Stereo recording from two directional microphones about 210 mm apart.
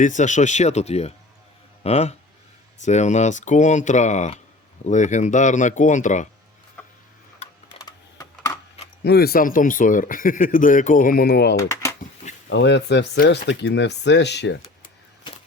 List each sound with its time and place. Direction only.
0.0 s speech: 35° left (ahead or behind)
7.9 s typing: 15° left (ahead or behind)
9.0 s speech: 45° left (ahead or behind)
11.5 s speech: 15° left (ahead or behind)
12.5 s speech: 55° left (ahead or behind)